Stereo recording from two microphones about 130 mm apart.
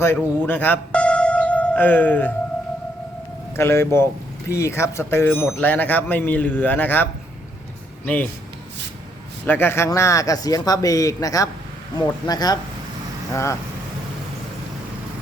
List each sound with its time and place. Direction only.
0.0 s speech: 15° left (ahead or behind)
3.5 s a man's voice: 20° left (ahead or behind)
9.5 s a man's voice: 15° left (ahead or behind)